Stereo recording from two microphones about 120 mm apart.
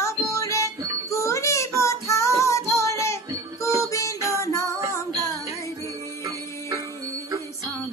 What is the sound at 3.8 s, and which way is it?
Music, 25° left (ahead or behind).